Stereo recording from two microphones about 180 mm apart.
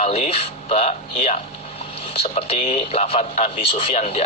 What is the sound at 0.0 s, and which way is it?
Speech, 35° left (ahead or behind).